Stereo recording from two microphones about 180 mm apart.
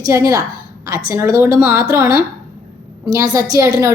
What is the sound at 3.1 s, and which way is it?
Speech, 20° right (ahead or behind).